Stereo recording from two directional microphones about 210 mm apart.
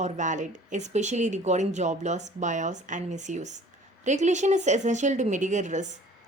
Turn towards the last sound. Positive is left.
turn(degrees=-35)  # may be behind; listen again after turning